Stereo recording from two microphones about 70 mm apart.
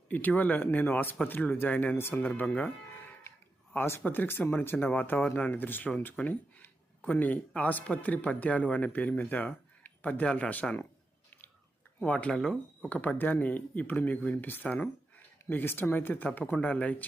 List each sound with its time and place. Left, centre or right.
0.1 s speech: left
3.7 s speech: left
11.9 s speech: centre
12.3 s speech: centre
12.9 s speech: left